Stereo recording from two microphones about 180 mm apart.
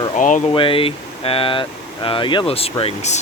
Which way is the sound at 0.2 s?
45° left (ahead or behind).